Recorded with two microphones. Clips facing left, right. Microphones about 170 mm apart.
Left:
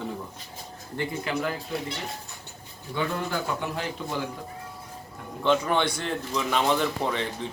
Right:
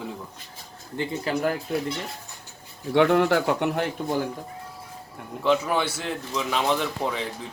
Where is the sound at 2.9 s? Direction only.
75° right (ahead or behind); by 4.2 s 50° right (ahead or behind).